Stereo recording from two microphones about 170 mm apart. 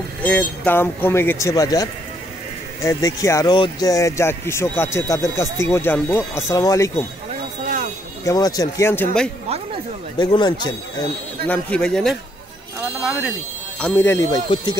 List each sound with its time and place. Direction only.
0.2 s speech: 10° left (ahead or behind)
7.6 s a sound: 50° right (ahead or behind)
8.3 s speech: 20° left (ahead or behind)
10.1 s speech: 25° left (ahead or behind)
11.4 s a man's voice: 5° left (ahead or behind)
13.7 s speech: 10° left (ahead or behind)